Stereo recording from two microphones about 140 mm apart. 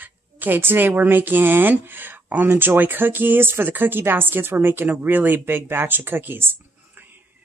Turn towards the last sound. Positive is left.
turn(degrees=-15)  # may be behind; listen again after turning